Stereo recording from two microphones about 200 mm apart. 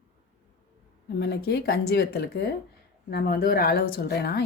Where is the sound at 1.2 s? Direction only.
55° left (ahead or behind).